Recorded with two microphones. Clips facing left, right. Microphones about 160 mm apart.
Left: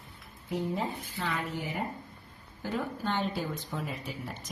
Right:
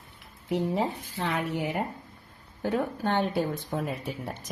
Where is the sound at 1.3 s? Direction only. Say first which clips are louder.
Right 6 dB; 65° right (ahead or behind).